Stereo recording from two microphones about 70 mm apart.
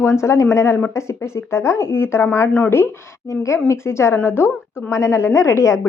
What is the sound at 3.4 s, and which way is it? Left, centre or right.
Speech, left.